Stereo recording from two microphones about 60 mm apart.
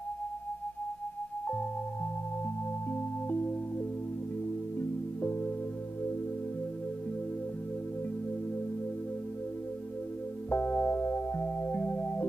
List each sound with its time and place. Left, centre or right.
2.9 s music: left
10.5 s music: left